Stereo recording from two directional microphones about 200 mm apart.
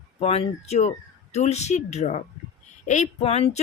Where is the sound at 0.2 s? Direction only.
30° left (ahead or behind).